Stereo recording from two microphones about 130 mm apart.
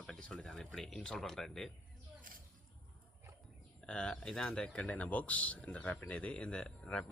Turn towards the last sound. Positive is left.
turn(degrees=5)  # may be behind; listen again after turning